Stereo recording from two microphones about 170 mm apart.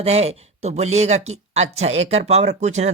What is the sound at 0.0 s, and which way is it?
Speech, 40° right (ahead or behind).